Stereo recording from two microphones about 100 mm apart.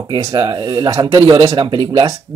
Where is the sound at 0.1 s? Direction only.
50° right (ahead or behind).